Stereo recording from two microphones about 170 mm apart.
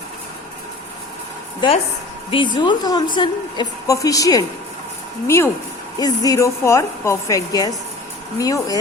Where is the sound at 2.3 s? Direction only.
30° left (ahead or behind).